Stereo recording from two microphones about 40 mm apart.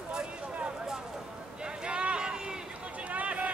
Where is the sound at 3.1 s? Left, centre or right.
Right.